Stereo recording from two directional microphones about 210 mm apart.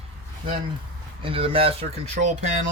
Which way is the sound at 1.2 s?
25° right (ahead or behind).